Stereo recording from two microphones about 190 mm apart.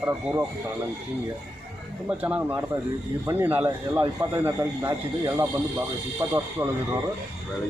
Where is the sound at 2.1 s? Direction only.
5° right (ahead or behind).